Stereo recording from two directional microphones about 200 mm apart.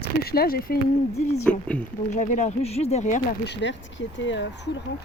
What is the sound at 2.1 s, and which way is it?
Speech, 40° left (ahead or behind).